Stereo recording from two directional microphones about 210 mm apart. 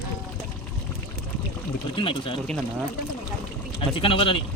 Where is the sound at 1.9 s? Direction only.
25° left (ahead or behind).